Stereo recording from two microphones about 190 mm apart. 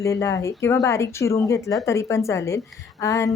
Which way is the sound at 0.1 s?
15° left (ahead or behind).